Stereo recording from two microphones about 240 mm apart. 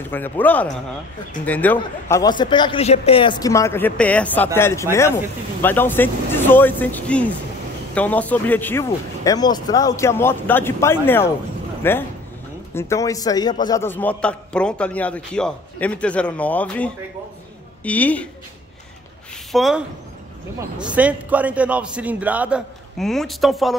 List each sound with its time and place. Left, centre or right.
0.1 s a man's voice: centre
19.5 s a man's voice: centre
20.8 s a man's voice: centre